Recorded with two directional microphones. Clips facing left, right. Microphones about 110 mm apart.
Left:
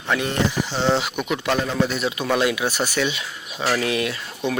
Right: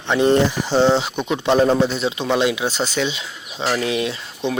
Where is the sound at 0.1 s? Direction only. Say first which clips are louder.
Right 7 dB; 30° right (ahead or behind).